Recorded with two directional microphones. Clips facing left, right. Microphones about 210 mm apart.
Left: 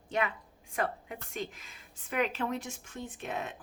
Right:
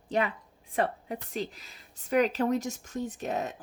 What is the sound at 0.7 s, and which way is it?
A woman's voice, 35° right (ahead or behind).